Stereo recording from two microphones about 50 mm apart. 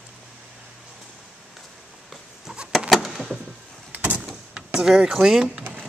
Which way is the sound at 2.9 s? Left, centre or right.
Centre.